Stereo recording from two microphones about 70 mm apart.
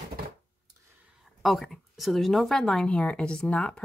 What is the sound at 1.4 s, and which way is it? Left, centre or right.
Speech, centre.